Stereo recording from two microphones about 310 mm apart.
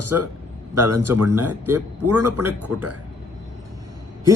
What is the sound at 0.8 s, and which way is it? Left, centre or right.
Speech, right.